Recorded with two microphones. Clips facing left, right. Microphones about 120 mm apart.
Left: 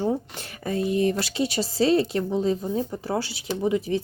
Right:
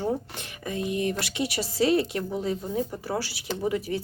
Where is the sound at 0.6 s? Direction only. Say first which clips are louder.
Left 5 dB; 35° left (ahead or behind).